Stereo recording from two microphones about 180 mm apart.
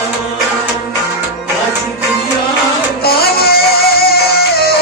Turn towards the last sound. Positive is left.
turn(degrees=60)  # may be behind; listen again after turning